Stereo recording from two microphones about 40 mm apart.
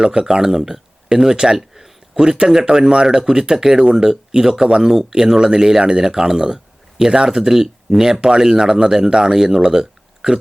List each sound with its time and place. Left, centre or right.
0.0 s speech: centre